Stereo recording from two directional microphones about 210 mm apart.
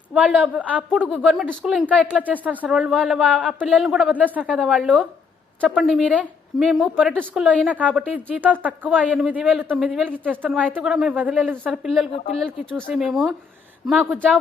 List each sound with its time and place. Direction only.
0.1 s a woman's voice: 5° right (ahead or behind)
12.1 s speech: 30° left (ahead or behind)
12.4 s a woman's voice: centre (ahead or behind)